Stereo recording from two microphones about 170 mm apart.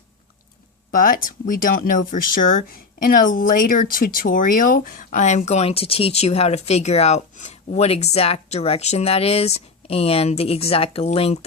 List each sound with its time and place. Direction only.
0.9 s speech: 55° left (ahead or behind); by 11.3 s 35° left (ahead or behind)